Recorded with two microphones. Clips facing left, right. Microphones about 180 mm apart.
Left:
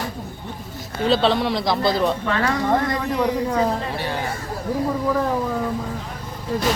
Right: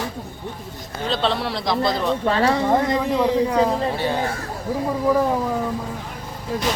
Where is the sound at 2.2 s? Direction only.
30° right (ahead or behind).